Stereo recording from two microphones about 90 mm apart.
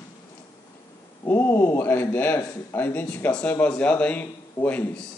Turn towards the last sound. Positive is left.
turn(degrees=20)  # may be behind; listen again after turning